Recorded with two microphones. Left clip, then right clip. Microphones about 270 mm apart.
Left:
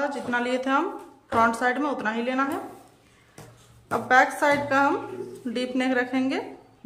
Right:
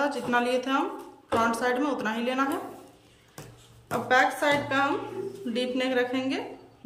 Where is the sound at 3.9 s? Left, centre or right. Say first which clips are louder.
Left 3 dB; centre.